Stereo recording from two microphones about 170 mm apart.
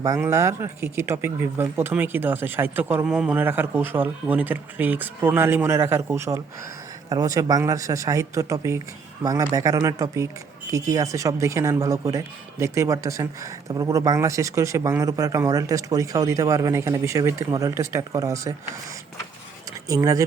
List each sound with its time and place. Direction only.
0.0 s speech: 15° right (ahead or behind)
19.9 s speech: 20° right (ahead or behind)